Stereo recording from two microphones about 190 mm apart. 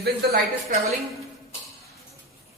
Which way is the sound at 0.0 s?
55° right (ahead or behind).